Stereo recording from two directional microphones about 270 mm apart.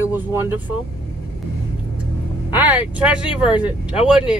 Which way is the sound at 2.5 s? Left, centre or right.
Centre.